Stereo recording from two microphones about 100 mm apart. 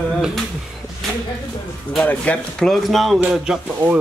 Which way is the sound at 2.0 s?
15° left (ahead or behind).